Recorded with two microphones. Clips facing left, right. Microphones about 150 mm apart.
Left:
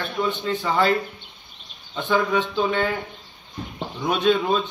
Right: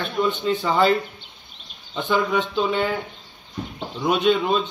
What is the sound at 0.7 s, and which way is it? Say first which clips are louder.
Speech: right 2 dB; 25° right (ahead or behind).